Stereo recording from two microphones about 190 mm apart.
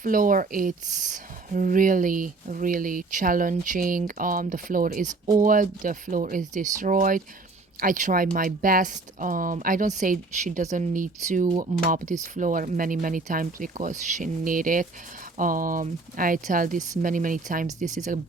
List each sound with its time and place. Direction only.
0.0 s speech: 45° right (ahead or behind)
11.4 s speech: 35° right (ahead or behind)
11.8 s speech: 45° right (ahead or behind)